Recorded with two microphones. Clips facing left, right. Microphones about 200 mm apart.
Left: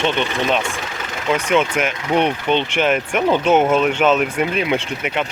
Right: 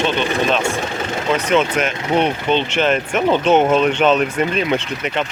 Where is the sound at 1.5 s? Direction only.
10° left (ahead or behind).